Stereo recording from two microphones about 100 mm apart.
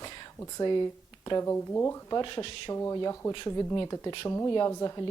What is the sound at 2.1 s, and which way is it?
Speech, 50° left (ahead or behind).